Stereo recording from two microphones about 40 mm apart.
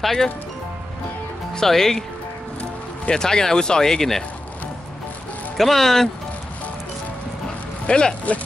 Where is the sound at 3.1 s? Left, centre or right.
Centre.